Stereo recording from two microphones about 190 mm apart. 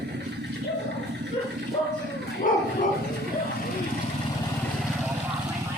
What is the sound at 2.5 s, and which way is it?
Bow-wow, 45° left (ahead or behind).